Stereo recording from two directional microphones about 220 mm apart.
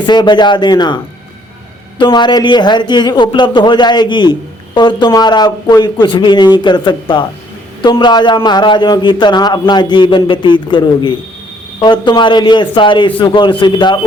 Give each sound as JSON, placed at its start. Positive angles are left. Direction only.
{"t": 0.0, "sound": "a man's voice", "side_deg": 20}